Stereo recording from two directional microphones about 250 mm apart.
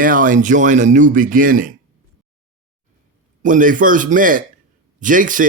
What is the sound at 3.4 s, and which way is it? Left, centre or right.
A man's voice, right.